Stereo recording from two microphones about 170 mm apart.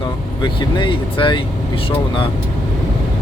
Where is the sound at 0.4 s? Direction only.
30° left (ahead or behind).